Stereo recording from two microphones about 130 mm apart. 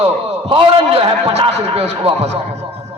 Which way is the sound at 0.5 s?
45° right (ahead or behind).